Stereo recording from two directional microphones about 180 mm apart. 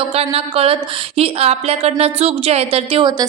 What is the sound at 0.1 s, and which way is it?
A woman's voice, 35° right (ahead or behind).